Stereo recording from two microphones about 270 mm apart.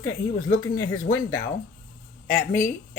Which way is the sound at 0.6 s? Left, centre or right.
Left.